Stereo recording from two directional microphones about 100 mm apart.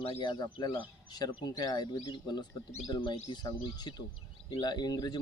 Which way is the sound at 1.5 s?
40° left (ahead or behind).